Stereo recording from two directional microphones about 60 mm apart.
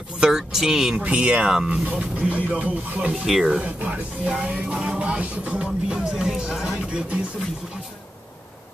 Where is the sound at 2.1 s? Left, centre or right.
Right.